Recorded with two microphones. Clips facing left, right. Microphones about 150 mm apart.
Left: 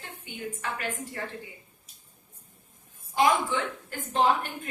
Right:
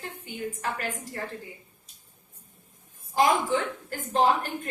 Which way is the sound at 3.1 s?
40° right (ahead or behind).